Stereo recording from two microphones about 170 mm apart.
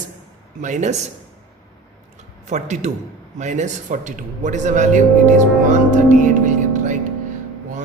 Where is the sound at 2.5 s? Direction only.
45° right (ahead or behind).